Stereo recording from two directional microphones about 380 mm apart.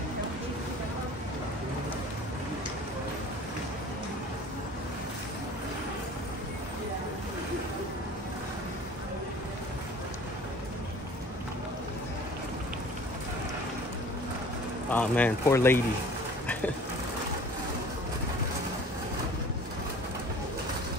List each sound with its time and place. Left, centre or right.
14.9 s speech: centre